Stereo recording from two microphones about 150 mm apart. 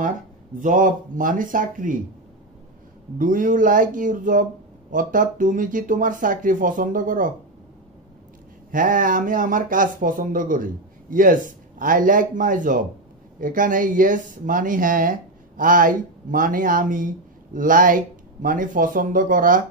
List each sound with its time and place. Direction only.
0.6 s speech: 60° right (ahead or behind)
3.2 s speech: 65° right (ahead or behind)
8.7 s speech: 65° right (ahead or behind)